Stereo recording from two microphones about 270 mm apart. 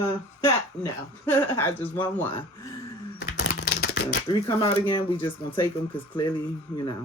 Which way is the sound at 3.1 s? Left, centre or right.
Left.